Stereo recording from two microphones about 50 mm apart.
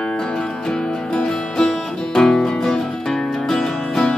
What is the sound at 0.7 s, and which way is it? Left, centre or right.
Music, centre.